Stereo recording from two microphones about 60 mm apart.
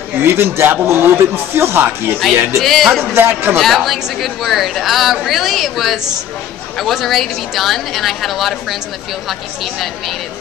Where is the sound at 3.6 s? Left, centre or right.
Centre.